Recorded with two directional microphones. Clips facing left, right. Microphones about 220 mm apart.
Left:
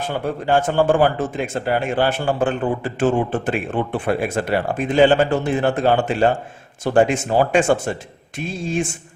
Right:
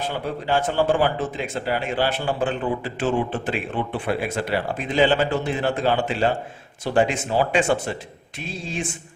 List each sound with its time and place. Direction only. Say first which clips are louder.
0.0 s a man's voice: left 4 dB; 50° left (ahead or behind)